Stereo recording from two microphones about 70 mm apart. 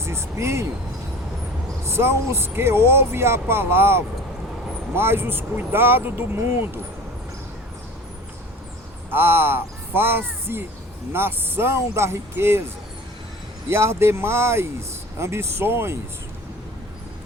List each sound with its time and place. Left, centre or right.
0.0 s speech: right
1.8 s speech: right
9.0 s speech: right
13.7 s speech: right